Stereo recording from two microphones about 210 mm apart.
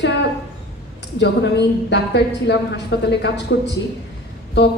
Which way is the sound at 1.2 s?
55° left (ahead or behind).